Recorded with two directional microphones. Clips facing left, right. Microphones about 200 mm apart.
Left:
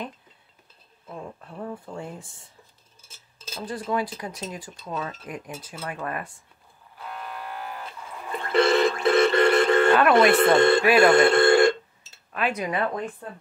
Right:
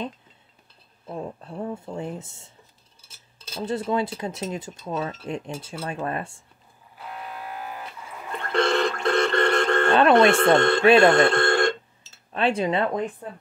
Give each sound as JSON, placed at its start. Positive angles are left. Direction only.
{"t": 1.0, "sound": "speech", "side_deg": -30}
{"t": 3.5, "sound": "speech", "side_deg": -25}
{"t": 8.3, "sound": "a sound", "side_deg": 5}
{"t": 10.3, "sound": "speech", "side_deg": 5}
{"t": 10.8, "sound": "speech", "side_deg": -25}
{"t": 11.1, "sound": "speech", "side_deg": 5}
{"t": 12.3, "sound": "speech", "side_deg": -30}